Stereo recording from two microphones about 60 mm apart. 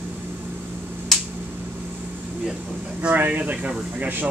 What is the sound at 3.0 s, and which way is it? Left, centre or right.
Speech, right.